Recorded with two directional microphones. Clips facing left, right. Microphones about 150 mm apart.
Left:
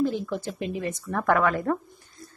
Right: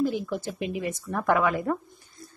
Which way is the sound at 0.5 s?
15° right (ahead or behind).